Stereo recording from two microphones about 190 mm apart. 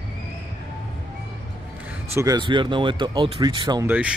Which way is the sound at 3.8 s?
10° right (ahead or behind).